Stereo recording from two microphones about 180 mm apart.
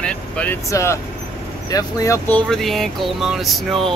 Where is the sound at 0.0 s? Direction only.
5° left (ahead or behind).